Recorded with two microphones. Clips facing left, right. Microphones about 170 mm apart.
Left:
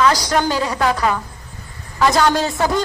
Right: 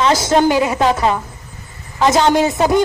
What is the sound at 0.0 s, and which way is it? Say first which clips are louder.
A woman's voice: right 3 dB; 25° right (ahead or behind).